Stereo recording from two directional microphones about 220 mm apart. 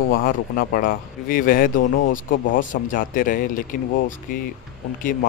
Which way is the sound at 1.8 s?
55° left (ahead or behind).